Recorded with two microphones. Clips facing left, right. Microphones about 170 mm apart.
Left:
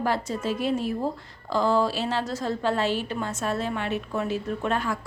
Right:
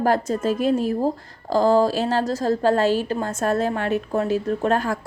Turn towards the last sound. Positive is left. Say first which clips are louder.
# right 6 dB
turn(degrees=-40)  # may be behind; listen again after turning